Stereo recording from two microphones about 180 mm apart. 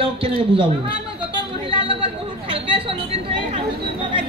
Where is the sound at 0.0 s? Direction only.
30° right (ahead or behind).